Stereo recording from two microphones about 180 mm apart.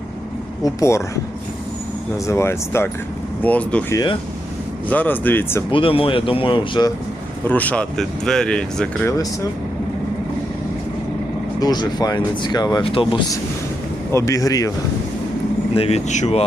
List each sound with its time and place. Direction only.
0.6 s speech: 15° left (ahead or behind)
2.2 s speech: 15° left (ahead or behind)
3.9 s speech: 25° left (ahead or behind)
4.9 s speech: 10° left (ahead or behind)
5.7 s speech: 30° left (ahead or behind)
7.4 s speech: 10° left (ahead or behind)
11.6 s speech: 25° left (ahead or behind)
14.1 s speech: 15° left (ahead or behind)
15.7 s speech: 35° left (ahead or behind)